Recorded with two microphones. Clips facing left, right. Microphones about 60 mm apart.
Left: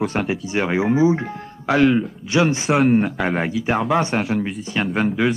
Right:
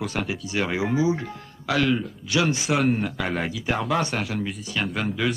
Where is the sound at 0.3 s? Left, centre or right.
Left.